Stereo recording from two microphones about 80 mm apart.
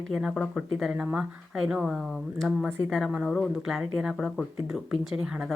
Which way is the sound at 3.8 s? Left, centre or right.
Centre.